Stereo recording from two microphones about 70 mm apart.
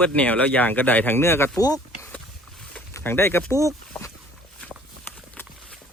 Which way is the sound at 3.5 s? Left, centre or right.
Right.